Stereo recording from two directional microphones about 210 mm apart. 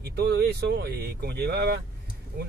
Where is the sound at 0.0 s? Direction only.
50° right (ahead or behind).